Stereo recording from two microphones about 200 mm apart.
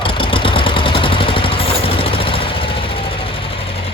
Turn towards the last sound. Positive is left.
turn(degrees=25)  # may be behind; listen again after turning